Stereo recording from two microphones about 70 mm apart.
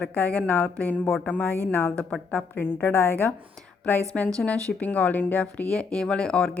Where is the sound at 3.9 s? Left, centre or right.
Left.